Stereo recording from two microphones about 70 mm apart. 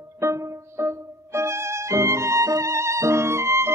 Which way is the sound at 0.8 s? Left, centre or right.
Right.